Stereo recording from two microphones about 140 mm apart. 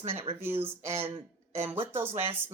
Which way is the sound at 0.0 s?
45° right (ahead or behind).